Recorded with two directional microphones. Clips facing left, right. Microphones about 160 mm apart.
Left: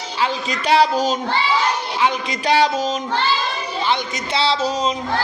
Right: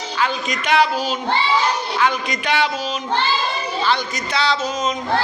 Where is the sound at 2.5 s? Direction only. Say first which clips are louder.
Left 4 dB; 40° left (ahead or behind).